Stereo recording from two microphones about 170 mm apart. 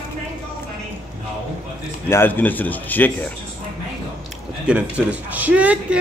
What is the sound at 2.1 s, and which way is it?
A man's voice, 10° left (ahead or behind).